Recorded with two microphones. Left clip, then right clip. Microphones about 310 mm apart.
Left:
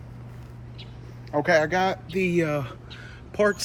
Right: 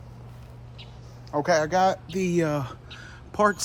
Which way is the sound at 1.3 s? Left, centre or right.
Centre.